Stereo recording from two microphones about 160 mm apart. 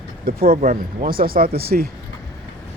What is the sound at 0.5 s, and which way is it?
Speech, 60° right (ahead or behind).